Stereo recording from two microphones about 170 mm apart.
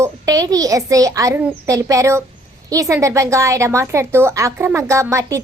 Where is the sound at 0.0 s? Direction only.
20° right (ahead or behind).